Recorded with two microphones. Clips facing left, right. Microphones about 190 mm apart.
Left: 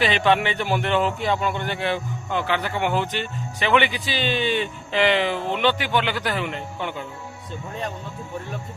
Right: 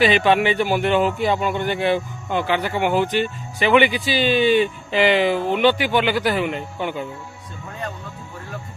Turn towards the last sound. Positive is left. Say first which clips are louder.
# right 4 dB
turn(degrees=-10)  # may be behind; listen again after turning